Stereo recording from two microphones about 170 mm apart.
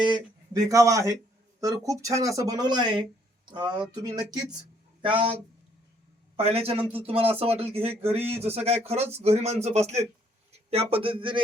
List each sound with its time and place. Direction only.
0.0 s speech: 25° right (ahead or behind)